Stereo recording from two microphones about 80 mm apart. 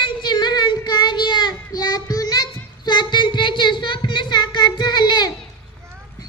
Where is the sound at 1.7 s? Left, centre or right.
Left.